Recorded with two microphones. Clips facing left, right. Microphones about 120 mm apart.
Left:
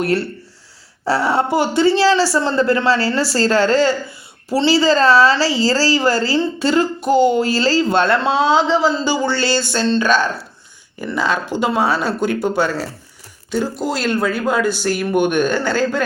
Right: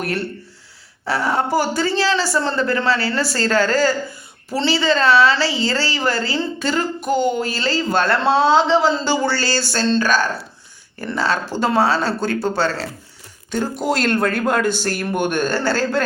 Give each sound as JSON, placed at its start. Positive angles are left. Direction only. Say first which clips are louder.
{"t": 0.0, "sound": "a woman's voice", "louder": "left 5 dB", "side_deg": 30}
{"t": 8.2, "sound": "speech", "louder": "right 1 dB", "side_deg": 10}
{"t": 13.5, "sound": "speech", "louder": "even", "side_deg": 5}